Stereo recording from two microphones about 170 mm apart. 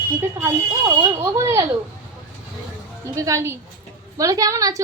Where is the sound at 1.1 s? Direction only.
15° right (ahead or behind).